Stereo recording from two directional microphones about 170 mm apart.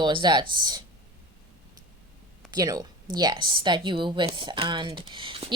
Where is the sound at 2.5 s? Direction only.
25° right (ahead or behind).